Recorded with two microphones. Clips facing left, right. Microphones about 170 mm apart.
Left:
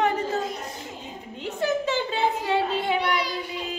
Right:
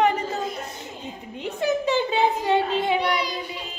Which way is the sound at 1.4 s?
20° right (ahead or behind).